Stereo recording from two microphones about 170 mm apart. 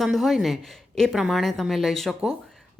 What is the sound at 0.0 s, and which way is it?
Speech, centre (ahead or behind).